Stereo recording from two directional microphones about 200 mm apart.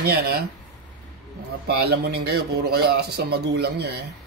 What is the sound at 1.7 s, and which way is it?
A man's voice, 50° right (ahead or behind).